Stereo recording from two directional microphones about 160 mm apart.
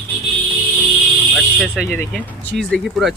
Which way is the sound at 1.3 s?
Centre (ahead or behind).